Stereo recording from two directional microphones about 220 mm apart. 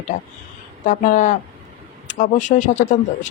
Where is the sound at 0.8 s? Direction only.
35° left (ahead or behind).